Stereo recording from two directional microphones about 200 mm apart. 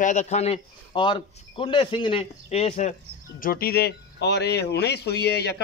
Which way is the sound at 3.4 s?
50° left (ahead or behind).